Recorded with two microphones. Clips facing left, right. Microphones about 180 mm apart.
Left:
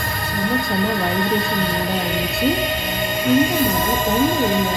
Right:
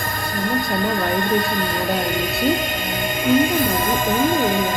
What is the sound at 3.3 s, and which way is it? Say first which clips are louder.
Speech: left 1 dB; 50° right (ahead or behind).